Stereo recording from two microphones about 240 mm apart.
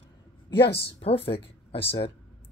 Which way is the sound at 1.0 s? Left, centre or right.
Left.